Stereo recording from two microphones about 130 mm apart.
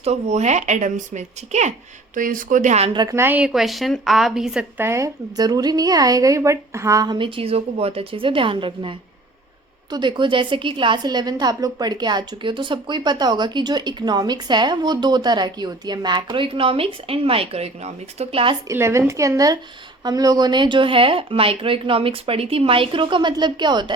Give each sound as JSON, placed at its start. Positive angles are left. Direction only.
{"t": 0.0, "sound": "speech", "side_deg": -60}
{"t": 2.1, "sound": "speech", "side_deg": -90}
{"t": 2.9, "sound": "a woman's voice", "side_deg": -35}
{"t": 3.2, "sound": "a woman's voice", "side_deg": -15}
{"t": 4.8, "sound": "a woman's voice", "side_deg": -20}
{"t": 18.7, "sound": "a woman's voice", "side_deg": -20}